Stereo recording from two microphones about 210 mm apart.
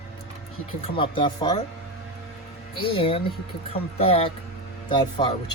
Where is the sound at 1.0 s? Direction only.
25° left (ahead or behind).